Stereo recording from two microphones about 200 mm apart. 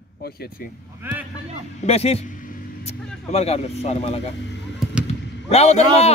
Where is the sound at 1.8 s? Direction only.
30° left (ahead or behind).